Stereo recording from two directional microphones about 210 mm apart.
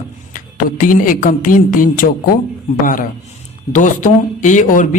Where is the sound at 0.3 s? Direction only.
40° left (ahead or behind).